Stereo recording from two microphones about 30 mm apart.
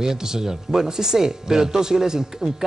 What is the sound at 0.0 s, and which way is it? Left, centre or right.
Speech, centre.